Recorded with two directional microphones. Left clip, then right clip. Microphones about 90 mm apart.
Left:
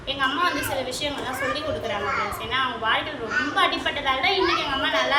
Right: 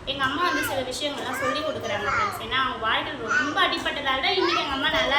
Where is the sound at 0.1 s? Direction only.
20° left (ahead or behind).